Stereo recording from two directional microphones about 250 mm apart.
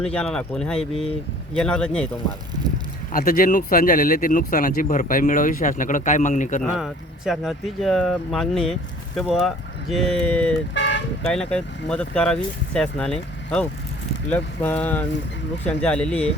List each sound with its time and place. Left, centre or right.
0.0 s speech: centre
3.1 s speech: left
6.6 s speech: centre
10.8 s toot: left
11.3 s speech: centre